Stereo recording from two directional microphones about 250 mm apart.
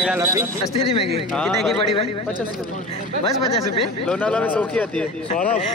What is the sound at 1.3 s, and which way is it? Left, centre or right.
Speech, centre.